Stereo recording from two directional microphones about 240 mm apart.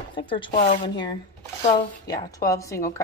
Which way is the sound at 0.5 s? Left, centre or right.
Left.